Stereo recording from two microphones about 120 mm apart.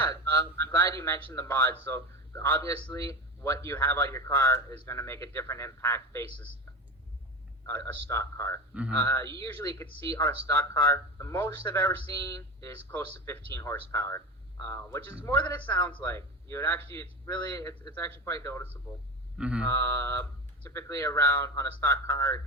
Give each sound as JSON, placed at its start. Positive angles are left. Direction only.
{"t": 0.0, "sound": "speech", "side_deg": 20}
{"t": 8.1, "sound": "a man's voice", "side_deg": 20}
{"t": 19.4, "sound": "speech", "side_deg": -10}
{"t": 19.6, "sound": "speech", "side_deg": 25}